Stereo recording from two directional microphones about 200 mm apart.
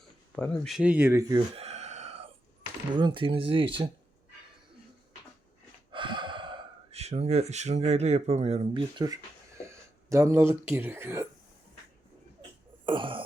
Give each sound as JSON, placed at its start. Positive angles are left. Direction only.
{"t": 0.0, "sound": "speech", "side_deg": 5}
{"t": 1.5, "sound": "a sound", "side_deg": -35}
{"t": 2.9, "sound": "speech", "side_deg": -25}
{"t": 5.9, "sound": "speech", "side_deg": -25}
{"t": 12.8, "sound": "throat clearing", "side_deg": -25}